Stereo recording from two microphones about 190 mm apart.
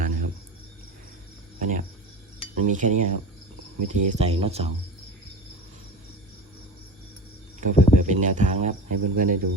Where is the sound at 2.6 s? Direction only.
40° right (ahead or behind).